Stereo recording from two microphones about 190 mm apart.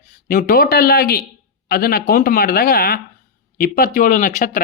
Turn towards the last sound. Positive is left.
turn(degrees=45)  # may be behind; listen again after turning